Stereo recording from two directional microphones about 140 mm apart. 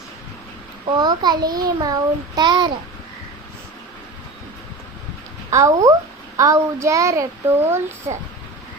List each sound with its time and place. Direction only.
0.9 s a child's voice: 30° right (ahead or behind)
5.5 s a child's voice: 25° right (ahead or behind)